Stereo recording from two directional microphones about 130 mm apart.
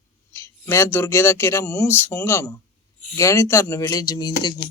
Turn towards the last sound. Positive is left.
turn(degrees=35)  # may be behind; listen again after turning